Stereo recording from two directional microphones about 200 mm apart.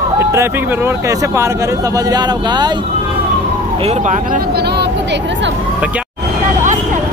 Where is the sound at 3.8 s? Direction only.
35° right (ahead or behind); by 5.5 s 65° right (ahead or behind).